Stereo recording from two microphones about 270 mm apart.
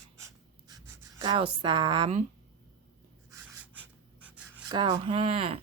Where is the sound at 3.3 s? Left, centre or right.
Centre.